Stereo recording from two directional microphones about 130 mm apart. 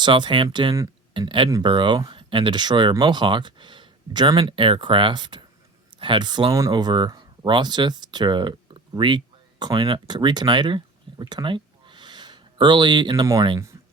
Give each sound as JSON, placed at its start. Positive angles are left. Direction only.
{"t": 0.0, "sound": "speech", "side_deg": -35}